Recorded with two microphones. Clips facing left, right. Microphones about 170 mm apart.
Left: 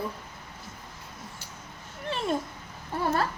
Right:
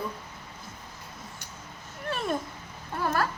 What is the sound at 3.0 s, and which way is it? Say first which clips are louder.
Speech: left 1 dB; 25° left (ahead or behind).